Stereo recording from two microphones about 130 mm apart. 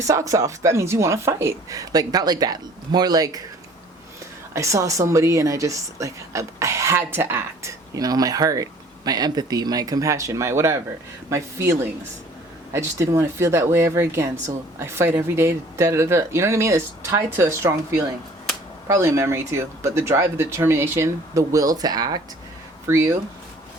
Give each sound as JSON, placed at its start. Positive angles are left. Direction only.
{"t": 0.0, "sound": "a woman's voice", "side_deg": -25}
{"t": 4.5, "sound": "a woman's voice", "side_deg": -25}
{"t": 22.9, "sound": "a woman's voice", "side_deg": -20}